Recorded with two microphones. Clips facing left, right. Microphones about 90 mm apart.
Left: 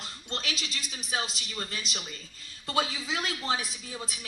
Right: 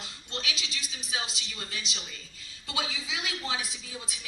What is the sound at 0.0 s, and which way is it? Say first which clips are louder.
A woman's voice: left 1 dB; 45° left (ahead or behind).